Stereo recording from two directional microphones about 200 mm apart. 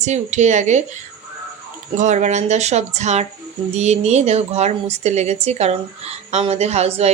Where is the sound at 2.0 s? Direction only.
35° right (ahead or behind).